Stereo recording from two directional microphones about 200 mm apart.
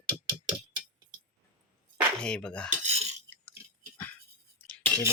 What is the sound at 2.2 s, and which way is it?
Speech, 5° left (ahead or behind).